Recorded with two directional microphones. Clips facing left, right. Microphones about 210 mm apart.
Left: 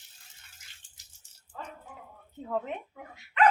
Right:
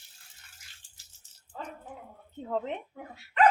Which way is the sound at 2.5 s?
35° right (ahead or behind).